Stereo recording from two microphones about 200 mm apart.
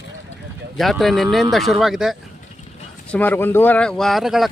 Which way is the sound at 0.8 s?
Centre (ahead or behind).